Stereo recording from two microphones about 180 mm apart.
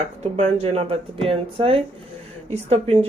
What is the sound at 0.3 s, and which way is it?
Speech, 35° right (ahead or behind).